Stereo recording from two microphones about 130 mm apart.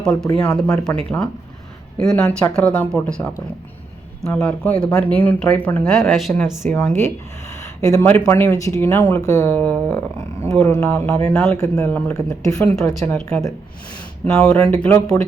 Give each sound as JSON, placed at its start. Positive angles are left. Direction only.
{"t": 0.0, "sound": "speech", "side_deg": 5}
{"t": 6.7, "sound": "speech", "side_deg": 10}
{"t": 7.6, "sound": "a sound", "side_deg": 25}
{"t": 8.2, "sound": "speech", "side_deg": 20}
{"t": 9.6, "sound": "speech", "side_deg": 10}
{"t": 11.5, "sound": "speech", "side_deg": 20}
{"t": 12.1, "sound": "speech", "side_deg": 25}
{"t": 12.7, "sound": "speech", "side_deg": 5}
{"t": 14.3, "sound": "speech", "side_deg": 20}